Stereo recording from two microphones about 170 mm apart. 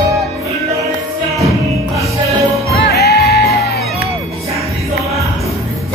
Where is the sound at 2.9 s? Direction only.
70° left (ahead or behind).